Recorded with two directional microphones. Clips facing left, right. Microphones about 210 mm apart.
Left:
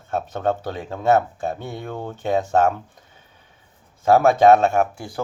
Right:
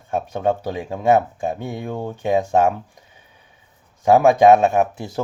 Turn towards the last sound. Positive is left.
turn(degrees=-25)  # may be behind; listen again after turning